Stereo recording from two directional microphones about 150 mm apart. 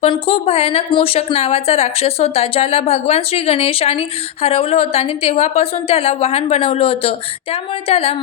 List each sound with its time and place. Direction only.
0.0 s a woman's voice: 40° left (ahead or behind)